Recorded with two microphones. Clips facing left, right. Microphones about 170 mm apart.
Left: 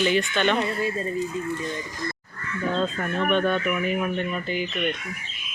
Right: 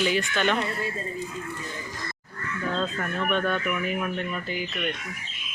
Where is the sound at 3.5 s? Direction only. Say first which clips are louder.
Left 3 dB; 15° left (ahead or behind).